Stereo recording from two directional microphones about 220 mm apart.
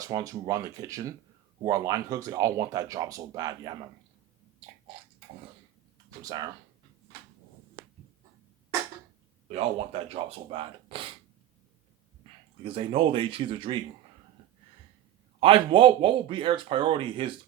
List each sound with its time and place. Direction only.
0.0 s speech: 15° right (ahead or behind)
6.1 s speech: 15° right (ahead or behind)
9.5 s speech: 25° right (ahead or behind)
12.6 s speech: 25° right (ahead or behind)
15.4 s speech: 25° right (ahead or behind)